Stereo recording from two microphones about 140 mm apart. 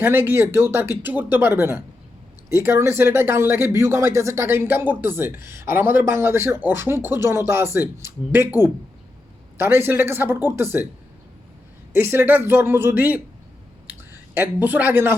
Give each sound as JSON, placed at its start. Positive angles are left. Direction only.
{"t": 0.0, "sound": "speech", "side_deg": -15}
{"t": 9.6, "sound": "speech", "side_deg": -15}
{"t": 11.9, "sound": "speech", "side_deg": -15}
{"t": 13.8, "sound": "clicking", "side_deg": -15}